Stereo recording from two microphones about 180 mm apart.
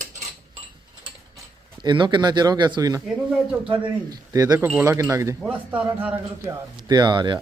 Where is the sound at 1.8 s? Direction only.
25° right (ahead or behind).